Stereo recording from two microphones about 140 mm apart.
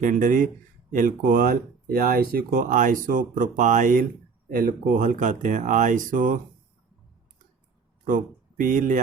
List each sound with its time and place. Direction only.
0.0 s speech: 70° right (ahead or behind)
4.4 s speech: 90° right; by 6.4 s 70° right (ahead or behind)
8.0 s speech: 70° right (ahead or behind)